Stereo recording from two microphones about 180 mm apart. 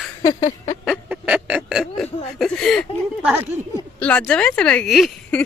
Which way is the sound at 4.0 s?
10° left (ahead or behind).